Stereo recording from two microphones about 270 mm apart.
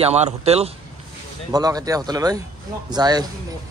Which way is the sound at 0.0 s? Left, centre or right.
Right.